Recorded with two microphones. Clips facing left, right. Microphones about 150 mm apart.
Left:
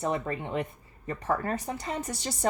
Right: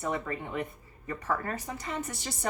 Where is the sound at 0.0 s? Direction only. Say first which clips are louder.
Left 3 dB; 30° left (ahead or behind).